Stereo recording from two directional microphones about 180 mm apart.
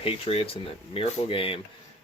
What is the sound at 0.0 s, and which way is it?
Speech, 30° left (ahead or behind).